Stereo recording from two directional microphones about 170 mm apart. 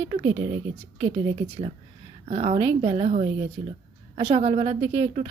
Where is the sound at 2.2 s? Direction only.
35° right (ahead or behind).